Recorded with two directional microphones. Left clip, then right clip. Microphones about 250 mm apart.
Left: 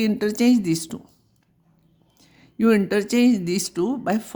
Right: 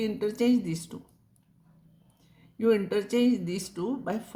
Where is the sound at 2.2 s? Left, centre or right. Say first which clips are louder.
Left 5 dB; left.